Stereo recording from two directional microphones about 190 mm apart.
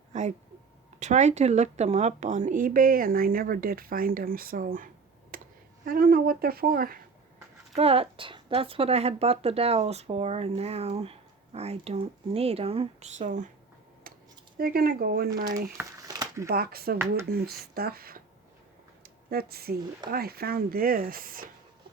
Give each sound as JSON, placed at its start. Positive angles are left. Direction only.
{"t": 0.1, "sound": "a sound", "side_deg": -40}
{"t": 0.9, "sound": "speech", "side_deg": -40}
{"t": 5.3, "sound": "a sound", "side_deg": -50}
{"t": 5.8, "sound": "speech", "side_deg": -50}
{"t": 7.8, "sound": "speech", "side_deg": -30}
{"t": 14.6, "sound": "speech", "side_deg": -50}
{"t": 15.8, "sound": "a sound", "side_deg": -20}
{"t": 16.5, "sound": "speech", "side_deg": -55}
{"t": 19.3, "sound": "speech", "side_deg": -55}